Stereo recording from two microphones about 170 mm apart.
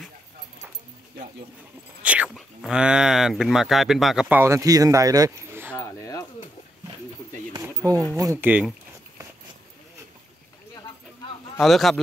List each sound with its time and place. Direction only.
2.0 s speech: 5° right (ahead or behind)
4.4 s speech: 20° right (ahead or behind)
5.8 s a sound: 20° left (ahead or behind)
7.5 s a sound: 20° right (ahead or behind)
8.2 s speech: 15° right (ahead or behind)
11.6 s speech: centre (ahead or behind)